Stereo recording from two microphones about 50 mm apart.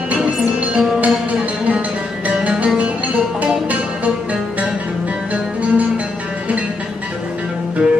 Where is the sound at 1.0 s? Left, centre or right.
Right.